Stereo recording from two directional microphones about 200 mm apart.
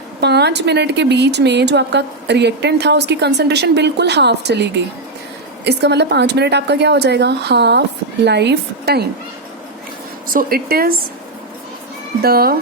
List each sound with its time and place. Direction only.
0.2 s a woman's voice: 55° right (ahead or behind)
10.3 s a woman's voice: 50° right (ahead or behind)
12.2 s a woman's voice: 50° right (ahead or behind)